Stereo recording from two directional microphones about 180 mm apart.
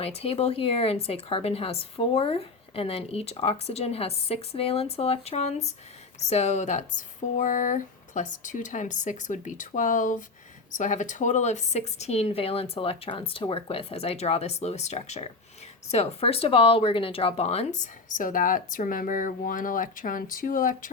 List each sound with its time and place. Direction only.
0.0 s speech: 35° left (ahead or behind)